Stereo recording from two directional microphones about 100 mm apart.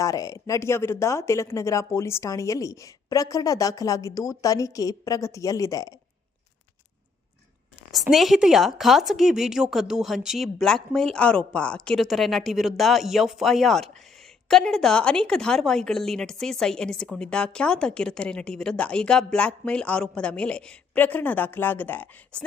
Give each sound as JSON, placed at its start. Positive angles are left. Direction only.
{"t": 0.0, "sound": "speech", "side_deg": 35}
{"t": 8.1, "sound": "a woman's voice", "side_deg": 0}